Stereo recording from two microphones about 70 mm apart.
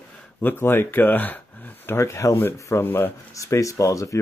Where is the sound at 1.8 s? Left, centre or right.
Left.